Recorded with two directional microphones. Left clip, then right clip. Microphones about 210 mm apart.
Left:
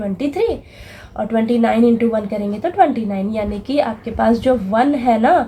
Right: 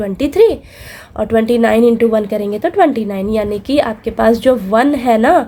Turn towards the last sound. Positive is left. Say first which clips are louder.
# right 3 dB
turn(degrees=-50)  # may be behind; listen again after turning